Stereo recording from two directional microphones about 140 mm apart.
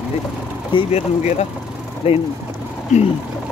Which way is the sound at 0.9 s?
50° left (ahead or behind).